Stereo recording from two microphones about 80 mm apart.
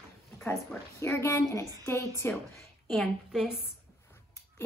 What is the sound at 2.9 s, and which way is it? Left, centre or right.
Speech, centre.